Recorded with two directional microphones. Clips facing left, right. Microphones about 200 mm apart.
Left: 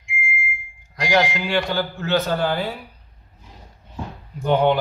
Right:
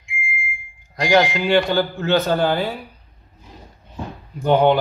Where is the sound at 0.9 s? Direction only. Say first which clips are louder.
Right 4 dB; 50° right (ahead or behind).